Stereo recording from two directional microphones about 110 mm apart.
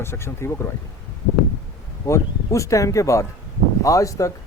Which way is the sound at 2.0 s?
25° left (ahead or behind).